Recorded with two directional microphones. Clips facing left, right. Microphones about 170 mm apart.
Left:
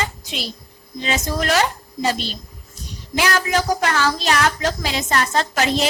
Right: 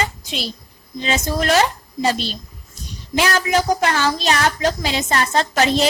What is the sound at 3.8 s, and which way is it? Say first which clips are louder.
A woman's voice: right 1 dB; 25° right (ahead or behind).